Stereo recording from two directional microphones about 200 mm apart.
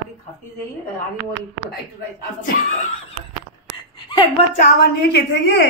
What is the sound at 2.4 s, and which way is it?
Speech, 40° left (ahead or behind).